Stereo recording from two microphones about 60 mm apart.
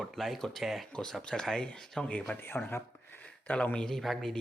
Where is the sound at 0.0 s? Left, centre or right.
Centre.